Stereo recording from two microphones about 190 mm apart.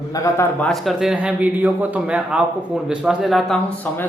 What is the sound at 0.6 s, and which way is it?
A man's voice, centre (ahead or behind).